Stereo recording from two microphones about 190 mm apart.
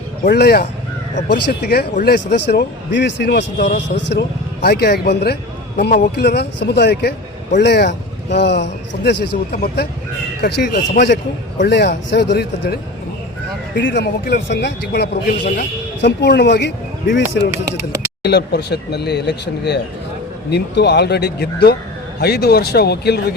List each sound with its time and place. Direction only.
0.3 s a man's voice: 55° left (ahead or behind)
1.6 s a man's voice: 55° left (ahead or behind)
17.5 s speech: 15° right (ahead or behind)
18.2 s a man's voice: 60° left (ahead or behind)